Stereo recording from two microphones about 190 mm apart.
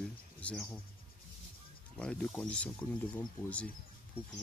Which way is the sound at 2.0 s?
5° left (ahead or behind).